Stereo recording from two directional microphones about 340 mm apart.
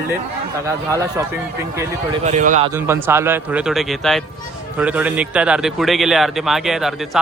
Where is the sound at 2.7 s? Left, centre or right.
Centre.